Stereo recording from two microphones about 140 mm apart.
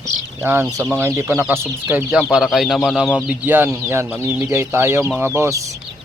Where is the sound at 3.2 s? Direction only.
15° right (ahead or behind).